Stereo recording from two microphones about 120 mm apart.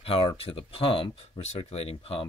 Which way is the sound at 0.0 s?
50° left (ahead or behind).